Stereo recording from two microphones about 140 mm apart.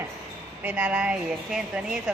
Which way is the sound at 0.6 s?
10° right (ahead or behind).